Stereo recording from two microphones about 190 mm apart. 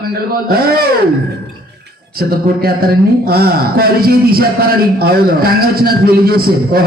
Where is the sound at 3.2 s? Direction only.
55° right (ahead or behind).